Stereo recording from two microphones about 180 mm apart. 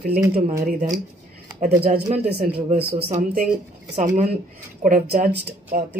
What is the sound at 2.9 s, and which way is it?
Speech, 30° right (ahead or behind).